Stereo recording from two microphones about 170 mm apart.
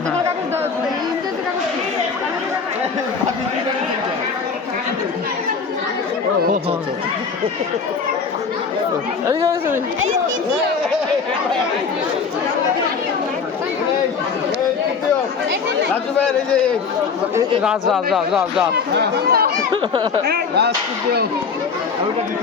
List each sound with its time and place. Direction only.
9.2 s speech: 15° right (ahead or behind)
16.2 s a man's voice: 5° left (ahead or behind)
18.9 s speech: 65° right (ahead or behind)
19.7 s speech: 30° right (ahead or behind)
20.2 s speech: 70° right (ahead or behind)